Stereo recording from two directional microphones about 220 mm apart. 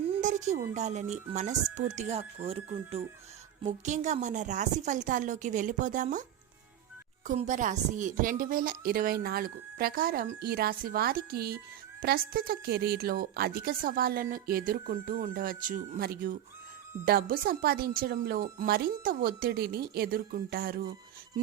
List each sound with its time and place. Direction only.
0.2 s a woman's voice: 35° right (ahead or behind)
7.3 s a woman's voice: 35° right (ahead or behind)